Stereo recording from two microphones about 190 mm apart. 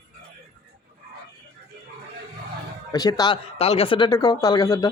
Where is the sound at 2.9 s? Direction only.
20° left (ahead or behind).